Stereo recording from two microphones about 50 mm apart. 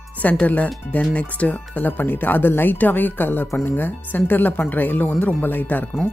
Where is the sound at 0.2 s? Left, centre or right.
Left.